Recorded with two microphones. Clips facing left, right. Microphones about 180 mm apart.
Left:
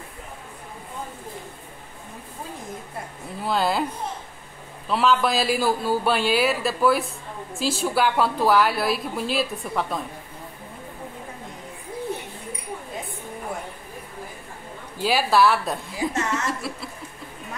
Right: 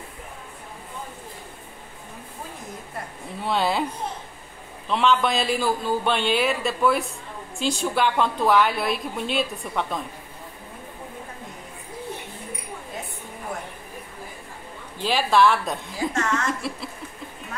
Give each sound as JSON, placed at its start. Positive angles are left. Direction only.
{"t": 3.3, "sound": "a woman's voice", "side_deg": 0}
{"t": 4.8, "sound": "a woman's voice", "side_deg": 5}
{"t": 15.0, "sound": "a woman's voice", "side_deg": 5}
{"t": 16.1, "sound": "a woman's voice", "side_deg": 20}
{"t": 16.4, "sound": "chuckle", "side_deg": 0}